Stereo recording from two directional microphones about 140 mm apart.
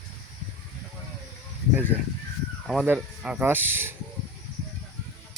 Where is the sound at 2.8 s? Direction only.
10° right (ahead or behind).